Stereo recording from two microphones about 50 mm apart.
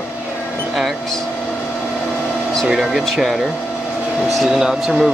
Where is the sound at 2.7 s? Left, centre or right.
Centre.